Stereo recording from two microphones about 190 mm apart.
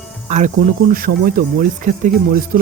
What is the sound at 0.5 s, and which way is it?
Speech, 50° right (ahead or behind).